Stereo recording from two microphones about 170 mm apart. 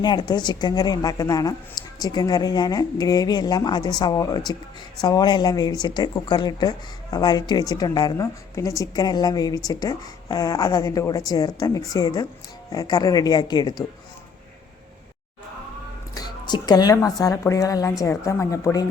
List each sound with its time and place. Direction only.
0.0 s speech: 25° left (ahead or behind)
16.1 s speech: 25° left (ahead or behind)